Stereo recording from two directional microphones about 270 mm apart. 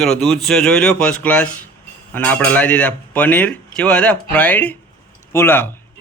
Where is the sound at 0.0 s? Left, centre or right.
Centre.